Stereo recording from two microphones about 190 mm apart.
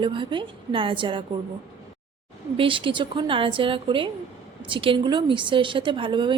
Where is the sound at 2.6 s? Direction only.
25° right (ahead or behind).